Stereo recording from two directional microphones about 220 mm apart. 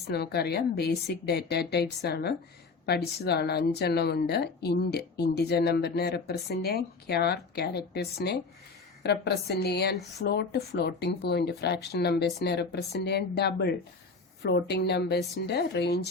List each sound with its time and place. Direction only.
0.1 s a woman's voice: 45° left (ahead or behind)